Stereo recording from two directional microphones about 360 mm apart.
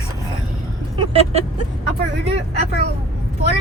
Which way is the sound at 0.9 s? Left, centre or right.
Centre.